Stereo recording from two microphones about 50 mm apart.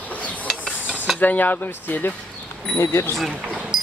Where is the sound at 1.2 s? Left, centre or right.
Left.